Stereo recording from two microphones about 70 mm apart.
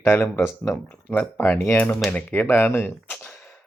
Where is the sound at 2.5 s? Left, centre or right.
Left.